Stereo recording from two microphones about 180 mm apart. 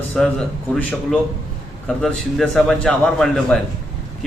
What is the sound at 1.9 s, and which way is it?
A man's voice, 5° left (ahead or behind).